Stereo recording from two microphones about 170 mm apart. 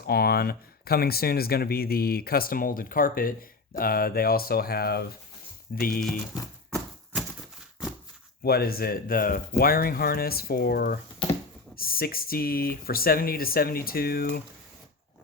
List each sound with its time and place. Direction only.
0.0 s speech: 65° left (ahead or behind)
6.7 s a sound: 5° right (ahead or behind)
8.4 s speech: 65° left (ahead or behind)